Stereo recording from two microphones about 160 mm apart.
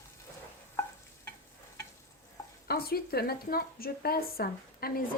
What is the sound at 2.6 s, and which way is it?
Speech, 75° left (ahead or behind).